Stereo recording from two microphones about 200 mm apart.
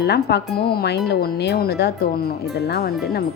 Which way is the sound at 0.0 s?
55° left (ahead or behind).